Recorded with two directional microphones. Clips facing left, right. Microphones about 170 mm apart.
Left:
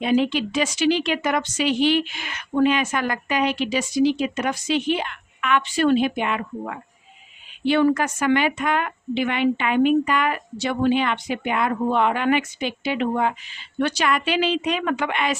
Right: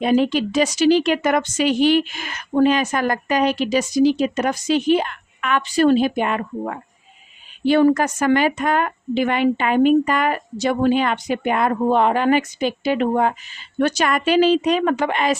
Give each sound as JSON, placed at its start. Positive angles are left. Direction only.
{"t": 0.0, "sound": "a woman's voice", "side_deg": -45}